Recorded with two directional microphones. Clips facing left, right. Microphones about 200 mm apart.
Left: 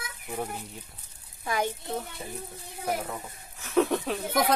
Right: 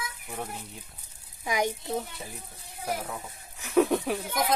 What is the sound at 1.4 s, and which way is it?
Speech, 15° right (ahead or behind).